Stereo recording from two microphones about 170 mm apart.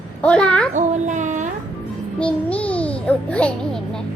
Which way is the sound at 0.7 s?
45° right (ahead or behind).